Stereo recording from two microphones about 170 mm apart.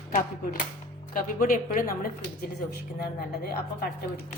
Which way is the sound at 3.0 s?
65° left (ahead or behind).